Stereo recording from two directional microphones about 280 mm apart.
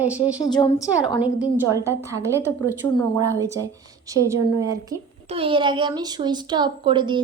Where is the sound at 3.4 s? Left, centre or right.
Centre.